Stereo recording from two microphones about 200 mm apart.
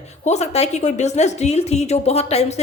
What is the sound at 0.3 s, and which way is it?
Speech, 30° left (ahead or behind).